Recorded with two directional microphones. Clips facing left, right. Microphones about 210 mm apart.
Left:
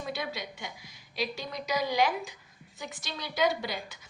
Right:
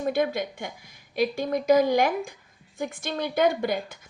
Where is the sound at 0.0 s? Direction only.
50° right (ahead or behind).